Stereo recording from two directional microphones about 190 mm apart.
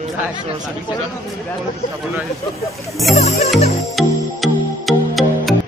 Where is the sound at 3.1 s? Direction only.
35° left (ahead or behind).